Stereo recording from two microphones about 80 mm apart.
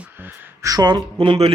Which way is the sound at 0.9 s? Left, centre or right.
Right.